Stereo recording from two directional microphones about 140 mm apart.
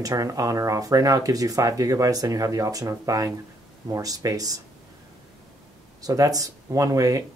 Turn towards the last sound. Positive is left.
turn(degrees=-25)  # may be behind; listen again after turning